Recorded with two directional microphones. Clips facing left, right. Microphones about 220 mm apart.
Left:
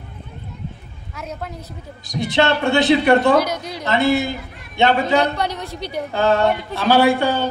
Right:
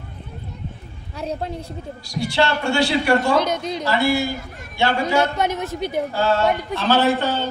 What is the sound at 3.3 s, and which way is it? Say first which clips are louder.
Speech: left 1 dB; 25° right (ahead or behind).